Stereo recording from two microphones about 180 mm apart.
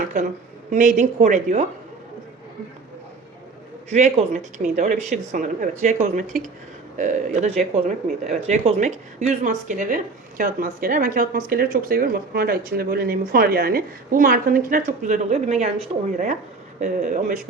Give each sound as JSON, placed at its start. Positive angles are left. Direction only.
{"t": 0.7, "sound": "speech", "side_deg": -45}
{"t": 3.8, "sound": "speech", "side_deg": -40}